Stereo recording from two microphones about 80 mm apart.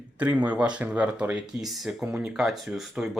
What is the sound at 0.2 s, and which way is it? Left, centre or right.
Speech, right.